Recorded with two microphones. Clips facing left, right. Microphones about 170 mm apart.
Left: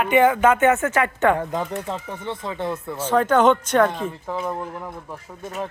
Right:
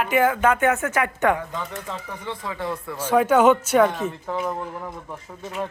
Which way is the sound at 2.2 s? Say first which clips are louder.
Left 2 dB; 25° left (ahead or behind).